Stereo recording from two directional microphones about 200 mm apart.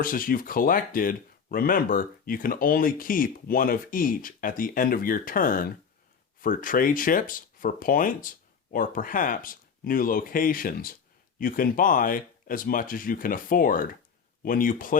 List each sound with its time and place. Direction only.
0.0 s speech: 45° left (ahead or behind)